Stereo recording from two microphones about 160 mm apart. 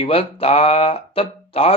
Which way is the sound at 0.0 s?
35° left (ahead or behind).